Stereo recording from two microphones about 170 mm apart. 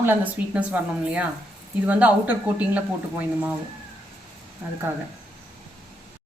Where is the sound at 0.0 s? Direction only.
10° right (ahead or behind).